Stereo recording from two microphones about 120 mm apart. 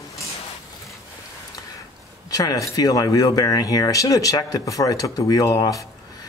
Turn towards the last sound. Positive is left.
turn(degrees=30)  # may be behind; listen again after turning